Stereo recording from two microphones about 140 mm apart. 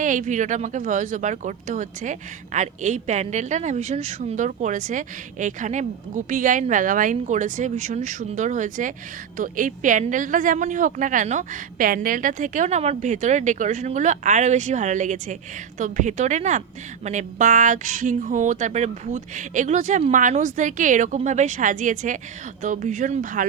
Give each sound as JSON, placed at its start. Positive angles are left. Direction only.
{"t": 0.0, "sound": "speech", "side_deg": -65}